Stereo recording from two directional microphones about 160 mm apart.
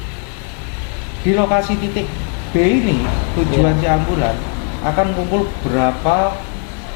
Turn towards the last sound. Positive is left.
turn(degrees=-5)  # may be behind; listen again after turning